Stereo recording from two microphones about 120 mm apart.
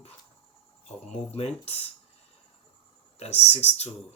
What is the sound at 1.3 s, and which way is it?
Speech, 60° left (ahead or behind).